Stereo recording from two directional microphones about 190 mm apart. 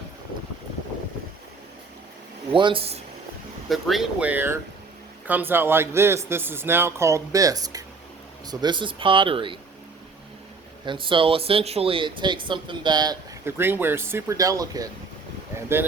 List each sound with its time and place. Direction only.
2.5 s speech: 25° right (ahead or behind)
3.7 s speech: centre (ahead or behind); by 9.6 s 25° right (ahead or behind)
10.8 s speech: 25° right (ahead or behind)
15.5 s a sound: 10° right (ahead or behind)